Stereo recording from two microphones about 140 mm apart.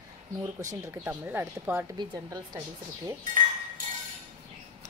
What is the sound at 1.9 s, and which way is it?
Speech, 25° right (ahead or behind).